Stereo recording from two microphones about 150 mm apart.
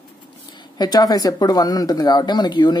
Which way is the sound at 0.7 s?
25° left (ahead or behind).